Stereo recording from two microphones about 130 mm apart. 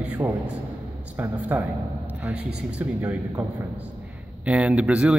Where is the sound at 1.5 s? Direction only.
10° right (ahead or behind).